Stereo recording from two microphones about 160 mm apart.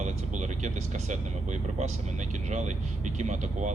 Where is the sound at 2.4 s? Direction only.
50° right (ahead or behind).